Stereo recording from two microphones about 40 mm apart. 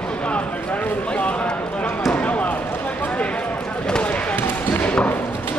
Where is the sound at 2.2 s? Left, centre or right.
Left.